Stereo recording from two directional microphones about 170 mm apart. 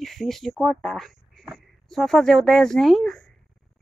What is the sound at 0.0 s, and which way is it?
Speech, centre (ahead or behind).